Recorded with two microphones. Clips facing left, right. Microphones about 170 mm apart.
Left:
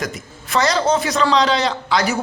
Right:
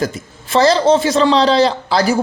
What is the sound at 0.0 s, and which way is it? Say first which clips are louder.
A man's voice: right 6 dB; 30° right (ahead or behind).